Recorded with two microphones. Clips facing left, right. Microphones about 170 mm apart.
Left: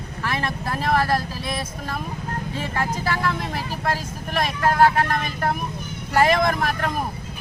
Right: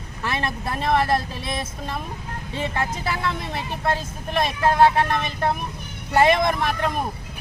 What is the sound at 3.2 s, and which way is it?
Speech, 25° right (ahead or behind).